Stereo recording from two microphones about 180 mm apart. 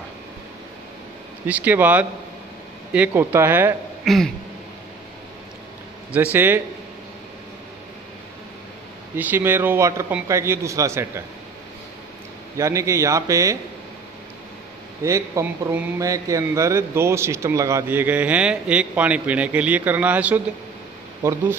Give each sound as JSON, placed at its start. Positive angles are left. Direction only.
{"t": 1.5, "sound": "a man's voice", "side_deg": -10}
{"t": 4.0, "sound": "throat clearing", "side_deg": 0}
{"t": 6.3, "sound": "a man's voice", "side_deg": -15}
{"t": 9.1, "sound": "a man's voice", "side_deg": -10}
{"t": 12.5, "sound": "a man's voice", "side_deg": -15}
{"t": 15.0, "sound": "a man's voice", "side_deg": -15}